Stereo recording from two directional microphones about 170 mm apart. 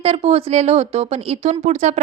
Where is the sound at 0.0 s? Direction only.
35° right (ahead or behind).